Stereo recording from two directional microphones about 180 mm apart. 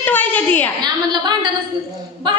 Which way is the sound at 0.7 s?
25° right (ahead or behind).